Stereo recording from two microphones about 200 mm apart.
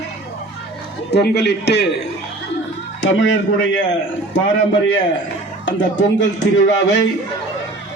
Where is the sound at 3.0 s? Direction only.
65° left (ahead or behind).